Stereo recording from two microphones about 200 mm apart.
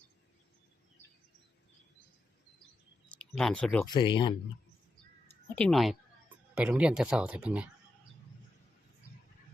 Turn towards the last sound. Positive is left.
turn(degrees=-5)  # may be behind; listen again after turning